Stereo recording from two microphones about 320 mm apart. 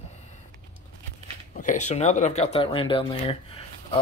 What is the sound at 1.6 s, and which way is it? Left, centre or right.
Speech, left.